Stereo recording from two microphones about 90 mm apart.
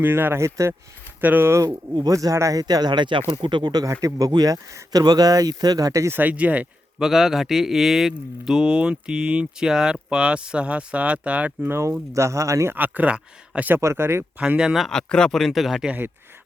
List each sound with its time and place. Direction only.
0.0 s speech: 25° right (ahead or behind)
1.2 s speech: 20° right (ahead or behind)
2.0 s speech: 40° right (ahead or behind)
6.1 s speech: 20° right (ahead or behind)
7.0 s speech: 5° right (ahead or behind)
11.7 s speech: 30° right (ahead or behind)
12.7 s speech: 20° right (ahead or behind)
13.7 s speech: 25° right (ahead or behind)
14.3 s speech: 10° right (ahead or behind)
14.8 s speech: 10° left (ahead or behind)
15.9 s speech: 20° right (ahead or behind)